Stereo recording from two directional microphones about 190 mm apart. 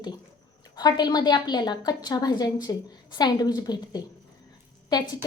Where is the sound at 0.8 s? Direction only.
20° left (ahead or behind).